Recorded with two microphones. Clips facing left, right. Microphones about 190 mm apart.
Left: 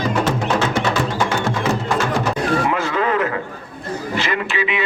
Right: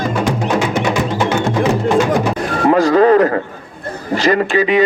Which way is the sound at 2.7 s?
40° right (ahead or behind).